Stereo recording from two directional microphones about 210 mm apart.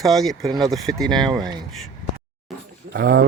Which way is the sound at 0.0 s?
Centre (ahead or behind).